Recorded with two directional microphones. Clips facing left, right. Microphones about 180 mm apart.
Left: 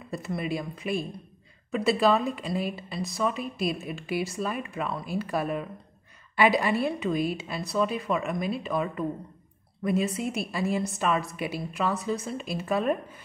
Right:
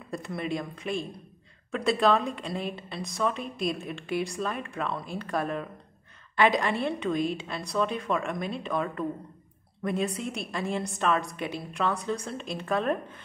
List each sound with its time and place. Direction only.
0.1 s speech: 5° left (ahead or behind)